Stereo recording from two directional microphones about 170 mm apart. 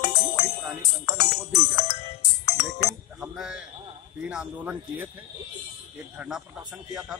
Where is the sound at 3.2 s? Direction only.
5° right (ahead or behind).